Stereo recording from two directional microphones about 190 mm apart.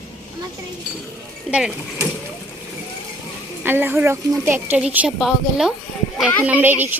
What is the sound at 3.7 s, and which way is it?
A woman's voice, 10° right (ahead or behind).